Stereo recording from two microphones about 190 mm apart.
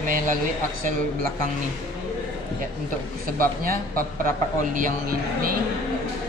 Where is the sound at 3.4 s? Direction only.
50° right (ahead or behind).